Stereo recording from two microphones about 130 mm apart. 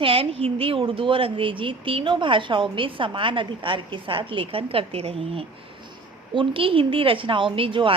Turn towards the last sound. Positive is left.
turn(degrees=-40)  # may be behind; listen again after turning